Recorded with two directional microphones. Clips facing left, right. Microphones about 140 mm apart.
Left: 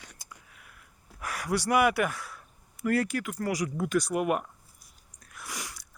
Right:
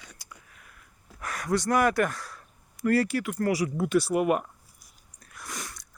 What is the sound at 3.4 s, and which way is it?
Speech, 5° right (ahead or behind).